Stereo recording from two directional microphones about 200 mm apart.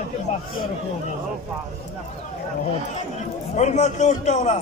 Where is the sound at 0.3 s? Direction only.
30° left (ahead or behind).